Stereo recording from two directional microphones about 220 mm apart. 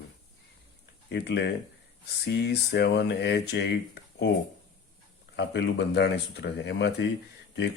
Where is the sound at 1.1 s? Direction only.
50° left (ahead or behind).